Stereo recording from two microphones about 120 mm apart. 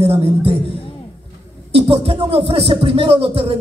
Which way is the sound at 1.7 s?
50° right (ahead or behind).